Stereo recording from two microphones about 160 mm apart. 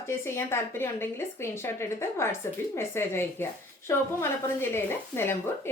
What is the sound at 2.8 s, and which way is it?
A woman's voice, 15° left (ahead or behind).